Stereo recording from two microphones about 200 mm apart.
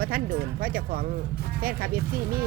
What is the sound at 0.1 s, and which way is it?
Speech, 45° right (ahead or behind).